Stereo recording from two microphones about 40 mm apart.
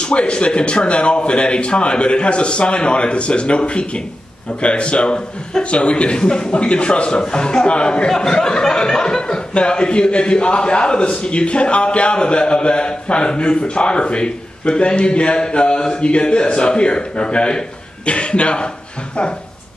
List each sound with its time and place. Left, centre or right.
0.0 s speech: left
6.1 s speech: centre